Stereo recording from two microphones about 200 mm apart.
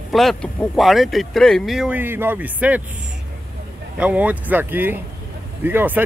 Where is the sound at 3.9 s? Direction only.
5° right (ahead or behind).